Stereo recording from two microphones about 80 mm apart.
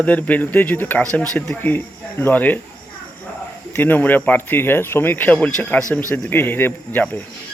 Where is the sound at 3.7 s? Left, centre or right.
Left.